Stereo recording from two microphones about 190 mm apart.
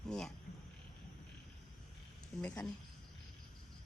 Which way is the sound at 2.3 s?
Centre (ahead or behind).